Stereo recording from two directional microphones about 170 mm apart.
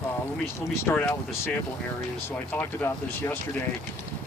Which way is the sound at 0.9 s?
15° left (ahead or behind).